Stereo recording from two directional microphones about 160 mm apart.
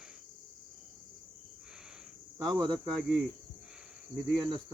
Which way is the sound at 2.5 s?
25° right (ahead or behind).